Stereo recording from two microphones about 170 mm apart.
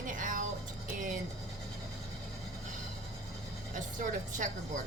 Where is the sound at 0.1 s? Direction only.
50° right (ahead or behind).